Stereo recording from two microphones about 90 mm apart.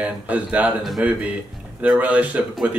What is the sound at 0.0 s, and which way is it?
Speech, 15° right (ahead or behind).